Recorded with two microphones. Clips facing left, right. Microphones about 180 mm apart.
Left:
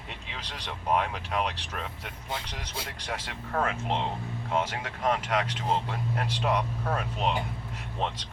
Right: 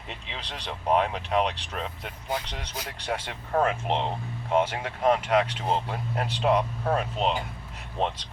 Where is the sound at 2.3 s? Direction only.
25° left (ahead or behind).